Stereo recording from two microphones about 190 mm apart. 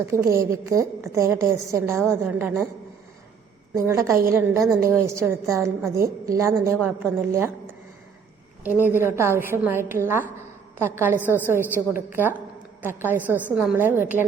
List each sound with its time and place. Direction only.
0.0 s a woman's voice: 15° right (ahead or behind)
3.8 s a woman's voice: 15° right (ahead or behind)
8.9 s a woman's voice: 15° right (ahead or behind)